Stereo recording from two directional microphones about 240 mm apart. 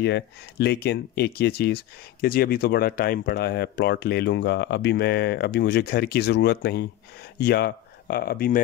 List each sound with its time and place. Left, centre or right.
0.0 s speech: left